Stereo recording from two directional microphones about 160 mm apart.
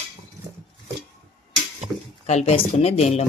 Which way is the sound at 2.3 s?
45° left (ahead or behind).